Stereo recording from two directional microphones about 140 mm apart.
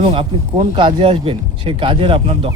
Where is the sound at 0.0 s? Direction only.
40° right (ahead or behind).